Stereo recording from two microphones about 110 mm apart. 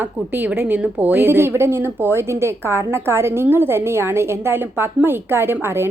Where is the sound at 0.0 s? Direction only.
20° right (ahead or behind).